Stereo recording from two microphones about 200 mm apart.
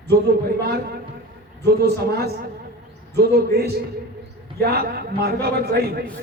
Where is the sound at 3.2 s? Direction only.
50° right (ahead or behind).